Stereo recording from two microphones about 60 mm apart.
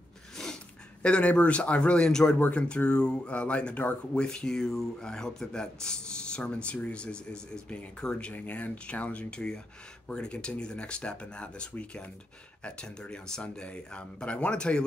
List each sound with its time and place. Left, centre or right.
1.0 s speech: centre
2.3 s speech: left